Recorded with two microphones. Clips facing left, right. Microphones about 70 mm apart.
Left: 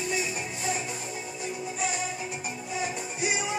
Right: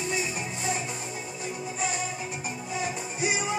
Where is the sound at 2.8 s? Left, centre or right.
Centre.